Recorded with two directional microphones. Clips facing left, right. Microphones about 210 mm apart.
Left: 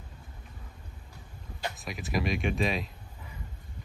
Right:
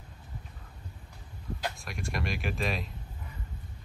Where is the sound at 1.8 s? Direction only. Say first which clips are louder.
Left 4 dB; centre (ahead or behind).